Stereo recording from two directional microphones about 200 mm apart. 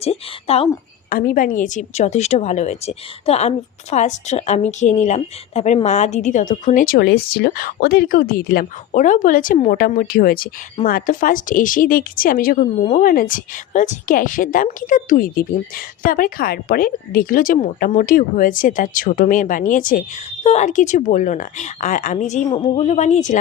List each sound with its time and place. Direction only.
0.0 s a woman's voice: 30° left (ahead or behind)
1.1 s a woman's voice: 45° left (ahead or behind)
22.4 s a woman's voice: 30° left (ahead or behind)